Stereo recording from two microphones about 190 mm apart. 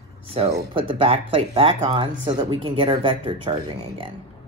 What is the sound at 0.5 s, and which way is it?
Speech, 25° right (ahead or behind).